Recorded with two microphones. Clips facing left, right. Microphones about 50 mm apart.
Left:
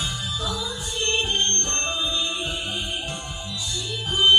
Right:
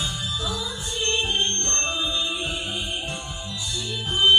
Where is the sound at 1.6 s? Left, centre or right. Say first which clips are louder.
Even; centre.